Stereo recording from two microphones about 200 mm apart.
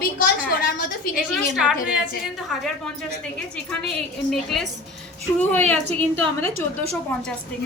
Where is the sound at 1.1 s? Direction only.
Centre (ahead or behind).